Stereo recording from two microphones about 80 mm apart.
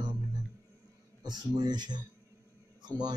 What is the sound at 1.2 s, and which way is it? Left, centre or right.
Speech, right.